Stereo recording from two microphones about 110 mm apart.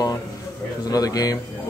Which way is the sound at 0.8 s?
35° left (ahead or behind).